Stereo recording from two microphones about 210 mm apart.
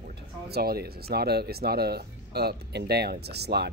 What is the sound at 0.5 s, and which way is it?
Speech, 45° right (ahead or behind).